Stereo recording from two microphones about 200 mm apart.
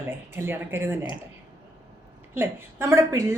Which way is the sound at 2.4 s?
10° right (ahead or behind).